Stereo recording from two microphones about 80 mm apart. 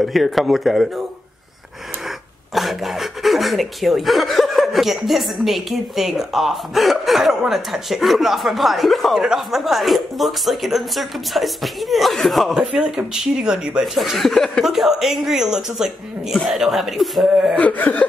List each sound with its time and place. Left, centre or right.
0.0 s speech: centre
2.0 s speech: centre
17.6 s speech: centre